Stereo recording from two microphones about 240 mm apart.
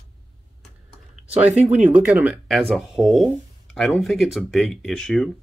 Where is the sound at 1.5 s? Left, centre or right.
Right.